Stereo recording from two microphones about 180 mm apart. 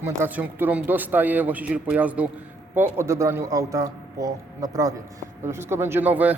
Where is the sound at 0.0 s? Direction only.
10° right (ahead or behind).